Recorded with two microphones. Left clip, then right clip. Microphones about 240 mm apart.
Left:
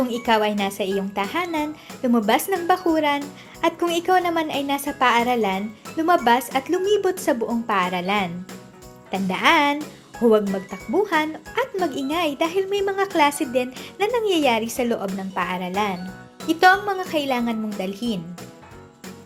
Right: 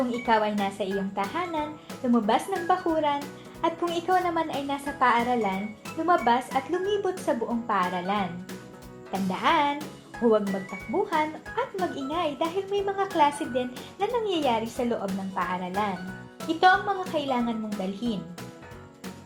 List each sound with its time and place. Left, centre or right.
0.1 s a woman's voice: left
9.3 s a woman's voice: left